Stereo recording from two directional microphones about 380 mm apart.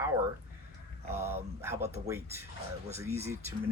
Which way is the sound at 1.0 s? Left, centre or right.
Centre.